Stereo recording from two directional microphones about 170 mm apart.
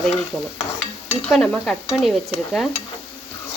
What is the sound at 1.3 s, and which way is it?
Speech, 5° left (ahead or behind).